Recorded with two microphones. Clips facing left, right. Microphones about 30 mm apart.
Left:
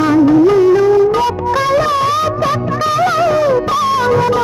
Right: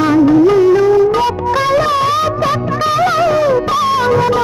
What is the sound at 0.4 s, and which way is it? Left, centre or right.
Music, centre.